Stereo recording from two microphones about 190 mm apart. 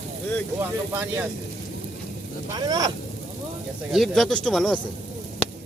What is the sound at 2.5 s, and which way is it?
Speech, 20° right (ahead or behind).